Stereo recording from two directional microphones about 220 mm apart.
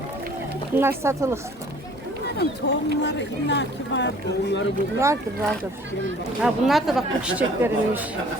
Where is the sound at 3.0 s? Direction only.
50° left (ahead or behind).